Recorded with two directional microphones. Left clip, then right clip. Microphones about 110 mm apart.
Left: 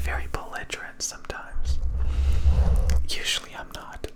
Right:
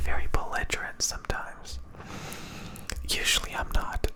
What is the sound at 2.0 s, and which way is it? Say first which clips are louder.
Whispering: left 1 dB; 40° right (ahead or behind).